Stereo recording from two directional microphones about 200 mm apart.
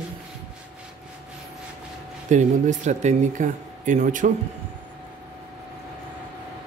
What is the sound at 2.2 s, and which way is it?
Speech, 35° right (ahead or behind).